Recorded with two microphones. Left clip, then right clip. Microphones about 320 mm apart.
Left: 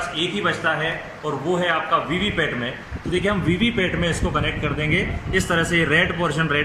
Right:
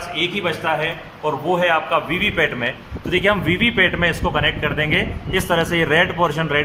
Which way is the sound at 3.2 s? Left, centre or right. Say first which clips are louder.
Right 5 dB; right.